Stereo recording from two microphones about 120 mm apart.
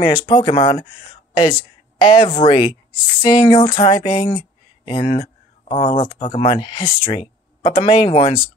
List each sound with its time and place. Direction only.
0.0 s speech: 45° left (ahead or behind)